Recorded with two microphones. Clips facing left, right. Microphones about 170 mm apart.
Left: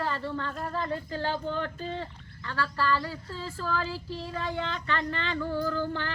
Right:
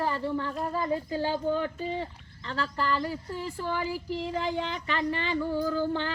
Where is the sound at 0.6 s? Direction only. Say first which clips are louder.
Right 3 dB; 10° right (ahead or behind).